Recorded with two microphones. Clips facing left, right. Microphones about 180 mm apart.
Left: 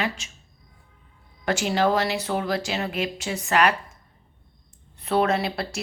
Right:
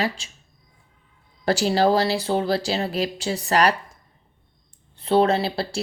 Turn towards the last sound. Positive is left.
turn(degrees=-30)  # may be behind; listen again after turning